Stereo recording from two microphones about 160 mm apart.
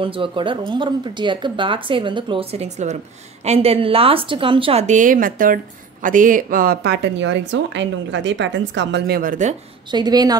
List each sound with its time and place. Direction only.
0.0 s a woman's voice: 35° right (ahead or behind); by 9.6 s 55° right (ahead or behind)
9.8 s a woman's voice: 25° right (ahead or behind)